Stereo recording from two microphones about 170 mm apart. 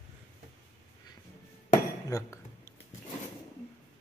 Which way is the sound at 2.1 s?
15° left (ahead or behind).